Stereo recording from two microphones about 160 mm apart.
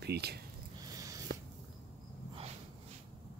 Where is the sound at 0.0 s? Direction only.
90° right.